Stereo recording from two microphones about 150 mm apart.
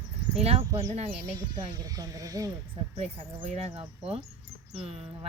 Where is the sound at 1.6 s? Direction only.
25° right (ahead or behind).